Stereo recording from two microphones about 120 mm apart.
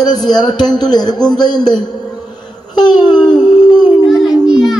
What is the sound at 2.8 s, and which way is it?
Speech, 35° left (ahead or behind).